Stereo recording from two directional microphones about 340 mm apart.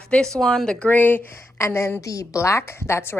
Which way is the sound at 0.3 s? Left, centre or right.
Centre.